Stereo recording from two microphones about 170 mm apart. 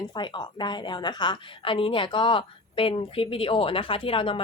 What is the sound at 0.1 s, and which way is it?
A woman's voice, 25° left (ahead or behind).